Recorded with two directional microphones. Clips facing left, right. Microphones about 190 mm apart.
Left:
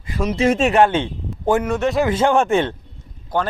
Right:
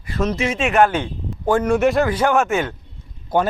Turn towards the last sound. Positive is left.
turn(degrees=-10)  # may be behind; listen again after turning